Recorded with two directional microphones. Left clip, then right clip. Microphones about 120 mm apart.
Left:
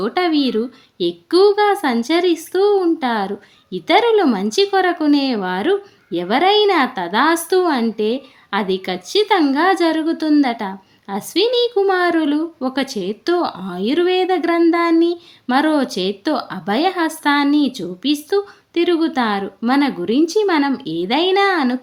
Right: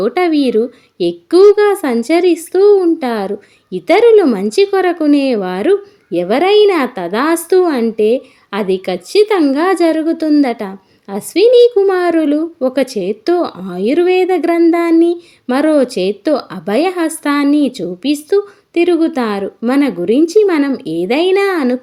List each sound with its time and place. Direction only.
0.0 s a woman's voice: 30° right (ahead or behind)